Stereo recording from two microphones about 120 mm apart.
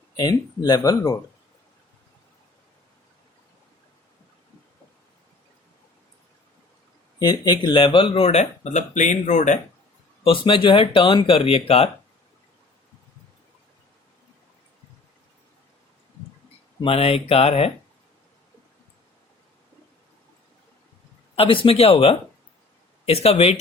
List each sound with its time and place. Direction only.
0.2 s speech: 35° left (ahead or behind)
7.2 s speech: 35° left (ahead or behind); by 9.6 s 90° left
10.2 s speech: 45° left (ahead or behind)
16.8 s speech: 55° left (ahead or behind)
21.3 s speech: 45° left (ahead or behind)